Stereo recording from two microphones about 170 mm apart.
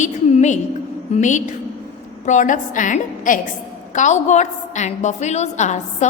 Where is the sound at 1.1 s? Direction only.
45° left (ahead or behind).